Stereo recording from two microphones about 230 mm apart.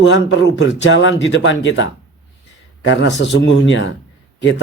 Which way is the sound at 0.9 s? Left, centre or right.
Left.